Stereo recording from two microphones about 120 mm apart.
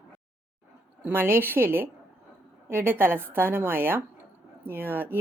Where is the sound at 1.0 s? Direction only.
15° right (ahead or behind).